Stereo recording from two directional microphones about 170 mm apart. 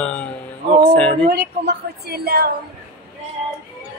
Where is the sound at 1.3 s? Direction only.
75° right (ahead or behind).